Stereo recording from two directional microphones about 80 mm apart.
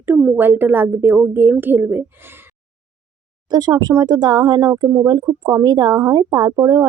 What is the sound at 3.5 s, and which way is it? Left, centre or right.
A woman's voice, right.